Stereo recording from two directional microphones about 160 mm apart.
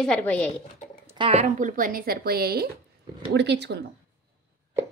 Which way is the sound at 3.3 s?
90° right.